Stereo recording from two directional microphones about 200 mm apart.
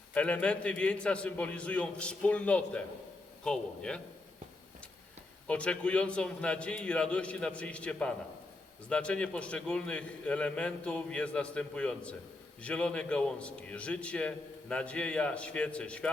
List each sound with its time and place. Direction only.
0.1 s a man's voice: 5° left (ahead or behind)
5.5 s a man's voice: 5° left (ahead or behind)